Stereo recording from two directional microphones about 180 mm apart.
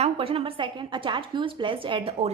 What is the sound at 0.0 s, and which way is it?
A woman's voice, 30° right (ahead or behind).